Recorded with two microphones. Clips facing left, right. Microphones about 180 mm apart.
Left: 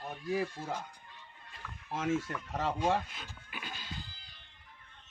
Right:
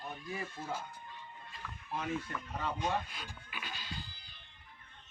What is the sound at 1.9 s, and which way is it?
Speech, 90° left.